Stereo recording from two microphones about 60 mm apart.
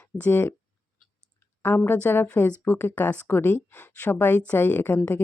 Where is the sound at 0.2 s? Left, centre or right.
Left.